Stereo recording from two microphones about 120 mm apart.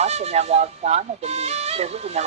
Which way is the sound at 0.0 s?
65° right (ahead or behind).